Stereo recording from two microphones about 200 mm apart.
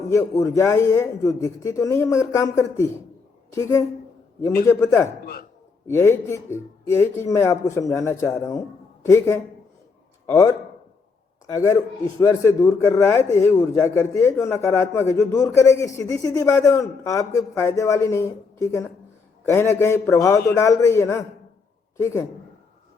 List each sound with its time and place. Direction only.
0.1 s a man's voice: 15° left (ahead or behind)
5.2 s a sound: 50° left (ahead or behind)
5.9 s a man's voice: 10° left (ahead or behind)